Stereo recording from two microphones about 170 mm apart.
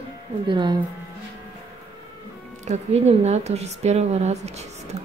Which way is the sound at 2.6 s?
40° right (ahead or behind).